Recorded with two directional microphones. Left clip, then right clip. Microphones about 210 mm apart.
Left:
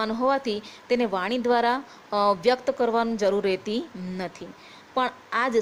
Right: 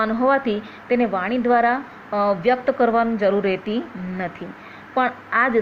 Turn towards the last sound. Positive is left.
turn(degrees=25)  # may be behind; listen again after turning